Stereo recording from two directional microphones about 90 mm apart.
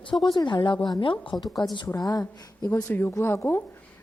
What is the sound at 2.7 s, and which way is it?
Speech, 25° left (ahead or behind).